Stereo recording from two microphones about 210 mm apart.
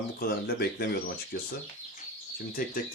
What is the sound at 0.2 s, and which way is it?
Speech, 45° left (ahead or behind).